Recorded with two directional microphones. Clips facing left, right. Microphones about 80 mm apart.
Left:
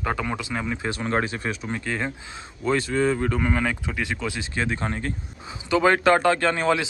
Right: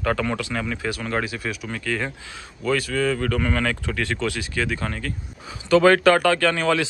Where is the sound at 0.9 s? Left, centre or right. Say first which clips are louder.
Left 3 dB; left.